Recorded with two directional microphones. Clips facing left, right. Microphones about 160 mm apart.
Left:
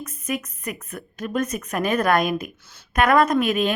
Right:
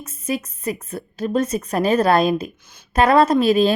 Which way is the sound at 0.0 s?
25° right (ahead or behind).